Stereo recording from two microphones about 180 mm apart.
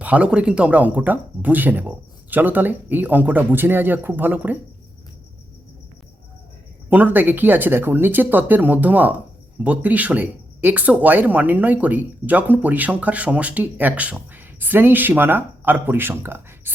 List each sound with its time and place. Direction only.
0.0 s speech: 5° right (ahead or behind)
6.9 s speech: 10° right (ahead or behind)